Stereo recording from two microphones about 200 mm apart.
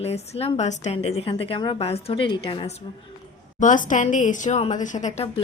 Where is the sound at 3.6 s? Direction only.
40° left (ahead or behind).